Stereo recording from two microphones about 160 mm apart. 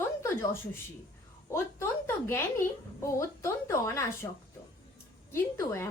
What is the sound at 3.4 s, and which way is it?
Speech, 15° left (ahead or behind).